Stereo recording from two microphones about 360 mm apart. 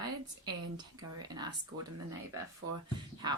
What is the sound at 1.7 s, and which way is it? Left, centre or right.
Speech, right.